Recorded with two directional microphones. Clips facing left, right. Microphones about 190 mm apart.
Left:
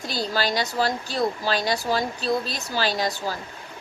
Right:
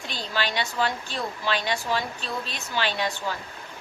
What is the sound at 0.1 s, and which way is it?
Speech, 40° left (ahead or behind).